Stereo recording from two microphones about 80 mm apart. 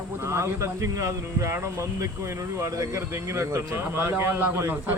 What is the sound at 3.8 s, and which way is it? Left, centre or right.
A man's voice, right.